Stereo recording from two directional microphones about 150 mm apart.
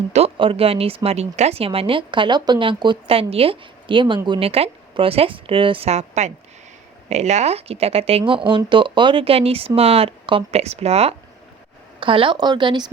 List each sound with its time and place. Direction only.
0.1 s speech: 40° right (ahead or behind)